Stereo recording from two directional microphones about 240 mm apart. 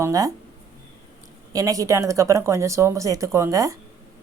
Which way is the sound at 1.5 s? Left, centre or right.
Centre.